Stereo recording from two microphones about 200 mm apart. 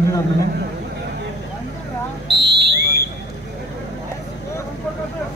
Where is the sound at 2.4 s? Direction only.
55° right (ahead or behind).